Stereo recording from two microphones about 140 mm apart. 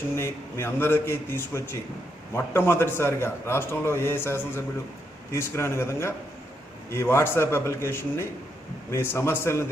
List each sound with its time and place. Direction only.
0.2 s a man's voice: 15° left (ahead or behind)